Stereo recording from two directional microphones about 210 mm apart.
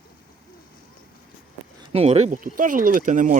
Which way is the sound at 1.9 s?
30° right (ahead or behind).